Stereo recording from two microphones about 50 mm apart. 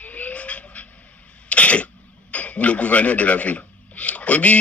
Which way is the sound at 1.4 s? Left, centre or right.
Left.